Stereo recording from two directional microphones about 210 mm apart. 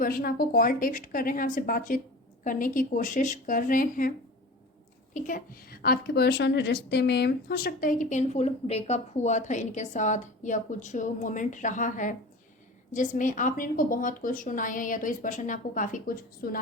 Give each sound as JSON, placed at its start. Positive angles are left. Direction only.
{"t": 0.0, "sound": "a woman's voice", "side_deg": 45}
{"t": 5.1, "sound": "a woman's voice", "side_deg": 40}